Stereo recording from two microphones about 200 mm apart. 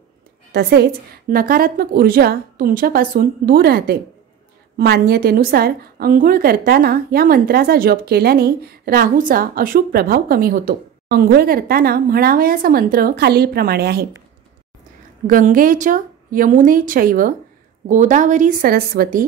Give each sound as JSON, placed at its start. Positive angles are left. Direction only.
{"t": 0.5, "sound": "a woman's voice", "side_deg": -55}
{"t": 15.2, "sound": "a woman's voice", "side_deg": -40}